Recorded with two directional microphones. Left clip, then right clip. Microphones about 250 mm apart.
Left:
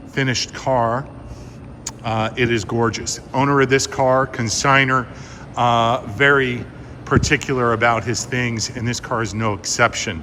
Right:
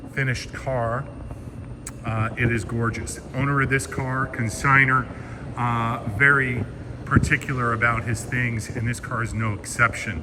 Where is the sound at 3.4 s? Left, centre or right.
Centre.